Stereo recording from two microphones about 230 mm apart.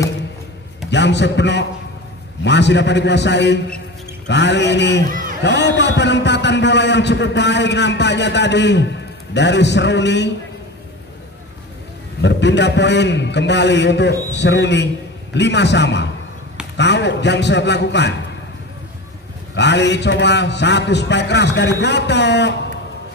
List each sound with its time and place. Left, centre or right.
0.8 s a man's voice: left
12.2 s a man's voice: left
19.5 s a man's voice: left